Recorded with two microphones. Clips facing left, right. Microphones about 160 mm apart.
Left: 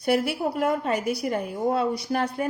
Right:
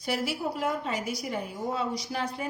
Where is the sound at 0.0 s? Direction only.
60° left (ahead or behind).